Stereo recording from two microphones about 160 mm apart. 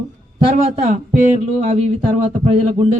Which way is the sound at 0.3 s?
40° right (ahead or behind).